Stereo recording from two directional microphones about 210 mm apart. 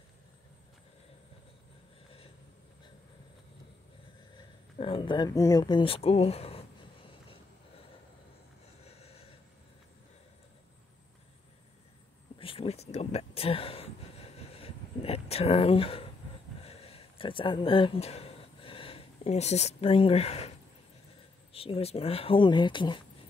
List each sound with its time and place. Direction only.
4.4 s speech: 25° left (ahead or behind)
12.4 s a sound: 25° left (ahead or behind)
21.5 s speech: 25° left (ahead or behind)